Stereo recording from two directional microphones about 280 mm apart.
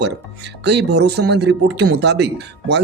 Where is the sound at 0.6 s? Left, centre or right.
Right.